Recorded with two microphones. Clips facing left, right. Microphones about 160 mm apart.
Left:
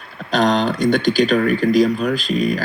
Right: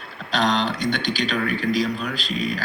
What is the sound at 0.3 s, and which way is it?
Speech, 45° left (ahead or behind).